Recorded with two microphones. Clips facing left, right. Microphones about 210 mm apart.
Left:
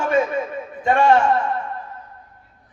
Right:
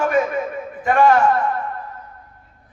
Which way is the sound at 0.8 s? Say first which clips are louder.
Right 1 dB; 25° left (ahead or behind).